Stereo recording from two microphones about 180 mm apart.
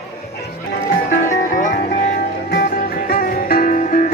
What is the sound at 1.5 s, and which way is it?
Music, 45° left (ahead or behind).